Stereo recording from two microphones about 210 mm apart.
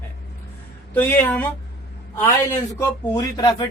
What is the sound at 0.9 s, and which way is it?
A man's voice, 5° left (ahead or behind).